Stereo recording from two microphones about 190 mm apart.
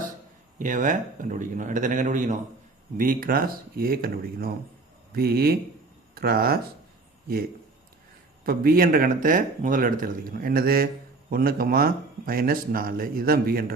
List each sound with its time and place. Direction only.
0.6 s a man's voice: 40° right (ahead or behind)
8.4 s a man's voice: 50° right (ahead or behind)